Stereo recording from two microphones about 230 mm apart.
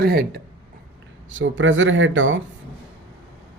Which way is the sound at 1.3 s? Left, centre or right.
Right.